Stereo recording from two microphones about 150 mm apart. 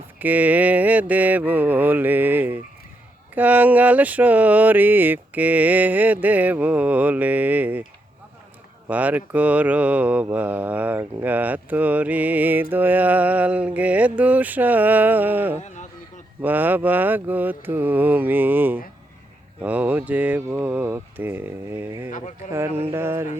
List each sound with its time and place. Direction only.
0.2 s mantra: 10° right (ahead or behind)
8.9 s mantra: 10° right (ahead or behind)
15.6 s a sound: 55° left (ahead or behind)
16.4 s mantra: 10° right (ahead or behind)